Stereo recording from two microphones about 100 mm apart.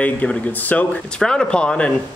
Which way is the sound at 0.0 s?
15° left (ahead or behind).